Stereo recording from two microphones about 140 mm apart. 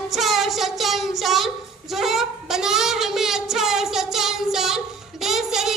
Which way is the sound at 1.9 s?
Centre (ahead or behind).